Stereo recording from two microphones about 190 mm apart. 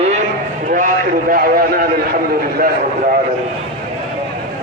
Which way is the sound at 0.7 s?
45° right (ahead or behind).